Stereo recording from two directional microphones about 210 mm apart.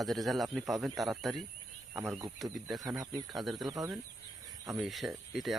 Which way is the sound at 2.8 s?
15° right (ahead or behind).